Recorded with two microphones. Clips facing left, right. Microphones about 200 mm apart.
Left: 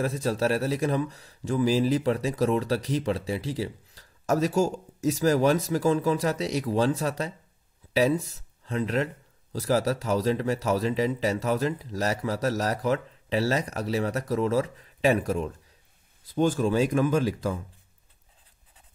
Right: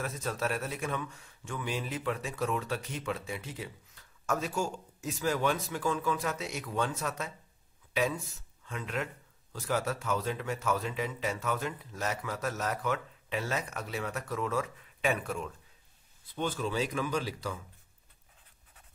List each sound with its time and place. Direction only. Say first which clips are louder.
0.0 s speech: left 8 dB; 35° left (ahead or behind); by 17.6 s 50° left (ahead or behind)